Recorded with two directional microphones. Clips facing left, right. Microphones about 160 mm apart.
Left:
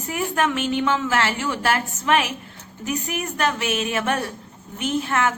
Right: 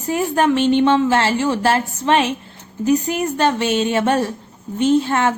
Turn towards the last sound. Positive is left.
turn(degrees=-30)  # may be behind; listen again after turning